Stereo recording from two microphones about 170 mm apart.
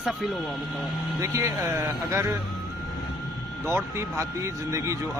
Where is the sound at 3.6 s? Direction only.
15° right (ahead or behind).